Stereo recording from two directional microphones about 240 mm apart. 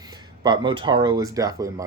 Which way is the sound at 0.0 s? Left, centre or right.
Centre.